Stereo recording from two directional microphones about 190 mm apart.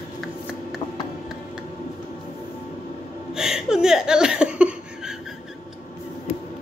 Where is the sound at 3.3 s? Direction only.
Centre (ahead or behind).